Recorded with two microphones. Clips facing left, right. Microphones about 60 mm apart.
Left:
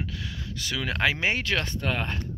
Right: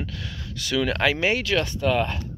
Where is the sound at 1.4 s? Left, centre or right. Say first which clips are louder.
Right 5 dB; left.